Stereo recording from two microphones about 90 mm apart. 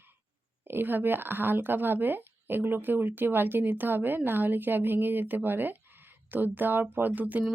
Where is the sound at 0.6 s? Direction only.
25° right (ahead or behind).